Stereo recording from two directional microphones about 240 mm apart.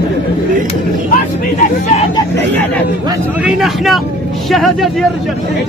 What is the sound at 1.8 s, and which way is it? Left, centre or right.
Speech, left.